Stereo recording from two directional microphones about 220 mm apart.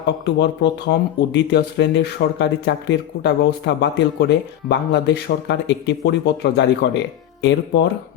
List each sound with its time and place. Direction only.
0.0 s speech: 50° left (ahead or behind)